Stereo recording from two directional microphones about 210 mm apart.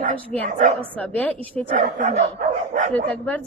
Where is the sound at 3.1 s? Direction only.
5° left (ahead or behind).